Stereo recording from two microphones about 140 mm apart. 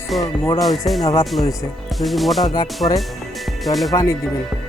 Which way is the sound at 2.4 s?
30° left (ahead or behind).